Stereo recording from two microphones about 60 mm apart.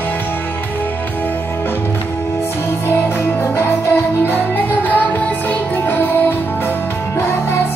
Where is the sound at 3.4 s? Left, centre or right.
Left.